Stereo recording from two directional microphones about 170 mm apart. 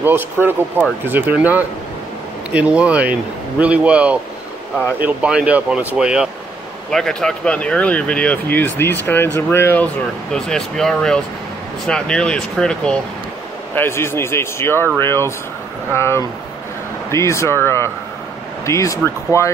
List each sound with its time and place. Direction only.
0.0 s speech: 10° right (ahead or behind); by 9.8 s 15° left (ahead or behind)
10.3 s speech: 5° left (ahead or behind)